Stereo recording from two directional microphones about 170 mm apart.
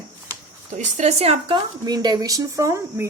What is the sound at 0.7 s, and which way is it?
A woman's voice, 45° right (ahead or behind).